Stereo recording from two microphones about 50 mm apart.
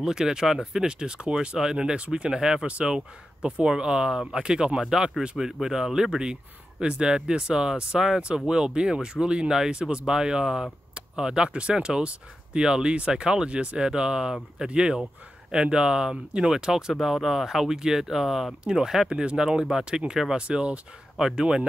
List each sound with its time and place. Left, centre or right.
0.0 s speech: centre